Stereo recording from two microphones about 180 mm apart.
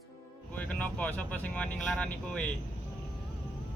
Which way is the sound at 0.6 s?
10° left (ahead or behind).